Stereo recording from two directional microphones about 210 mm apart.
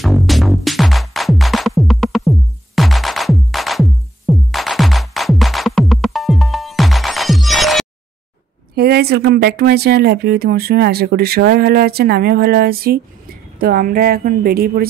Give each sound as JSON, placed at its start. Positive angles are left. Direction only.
{"t": 0.0, "sound": "music", "side_deg": 0}
{"t": 8.7, "sound": "speech", "side_deg": -50}